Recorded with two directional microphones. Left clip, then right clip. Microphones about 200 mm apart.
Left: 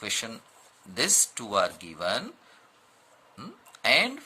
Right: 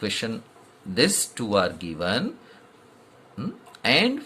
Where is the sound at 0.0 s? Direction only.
30° left (ahead or behind).